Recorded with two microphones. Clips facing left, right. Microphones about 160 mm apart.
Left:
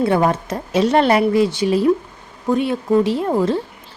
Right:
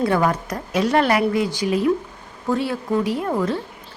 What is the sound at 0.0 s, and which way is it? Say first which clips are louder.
A woman's voice: left 3 dB; 25° left (ahead or behind).